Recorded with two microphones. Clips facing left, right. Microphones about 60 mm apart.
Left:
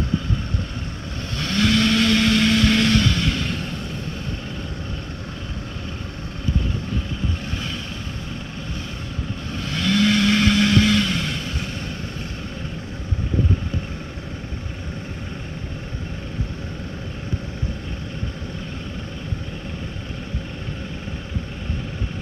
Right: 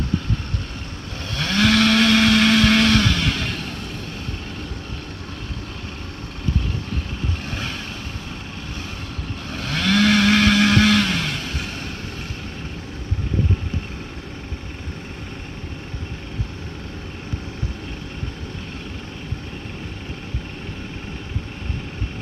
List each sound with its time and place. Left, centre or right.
1.3 s vehicle: right
9.5 s vehicle: right